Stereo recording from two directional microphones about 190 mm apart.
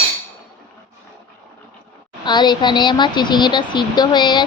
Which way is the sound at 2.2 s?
20° left (ahead or behind).